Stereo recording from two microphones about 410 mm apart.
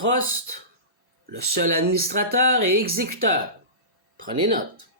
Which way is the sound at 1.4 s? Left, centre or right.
Right.